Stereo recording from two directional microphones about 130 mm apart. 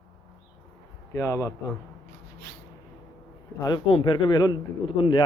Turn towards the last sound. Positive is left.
turn(degrees=40)  # may be behind; listen again after turning